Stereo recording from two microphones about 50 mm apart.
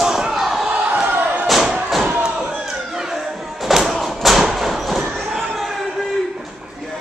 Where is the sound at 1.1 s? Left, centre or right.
Right.